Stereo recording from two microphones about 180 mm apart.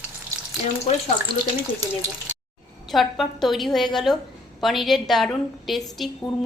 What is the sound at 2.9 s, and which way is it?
A woman's voice, centre (ahead or behind).